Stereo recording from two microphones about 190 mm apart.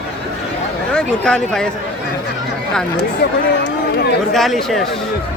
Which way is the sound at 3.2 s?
60° left (ahead or behind).